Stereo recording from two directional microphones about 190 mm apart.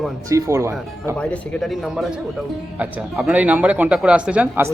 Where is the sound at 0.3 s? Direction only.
15° right (ahead or behind).